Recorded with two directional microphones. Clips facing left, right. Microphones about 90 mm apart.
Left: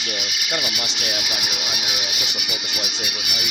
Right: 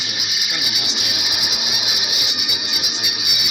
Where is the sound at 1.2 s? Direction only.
5° right (ahead or behind).